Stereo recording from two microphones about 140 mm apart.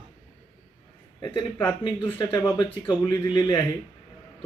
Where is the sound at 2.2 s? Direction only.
30° left (ahead or behind).